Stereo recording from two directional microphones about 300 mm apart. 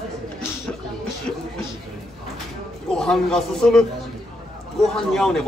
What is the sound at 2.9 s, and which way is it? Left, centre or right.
A woman's voice, centre.